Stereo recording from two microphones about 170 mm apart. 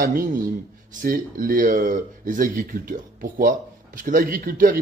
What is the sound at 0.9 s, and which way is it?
Speech, 55° right (ahead or behind).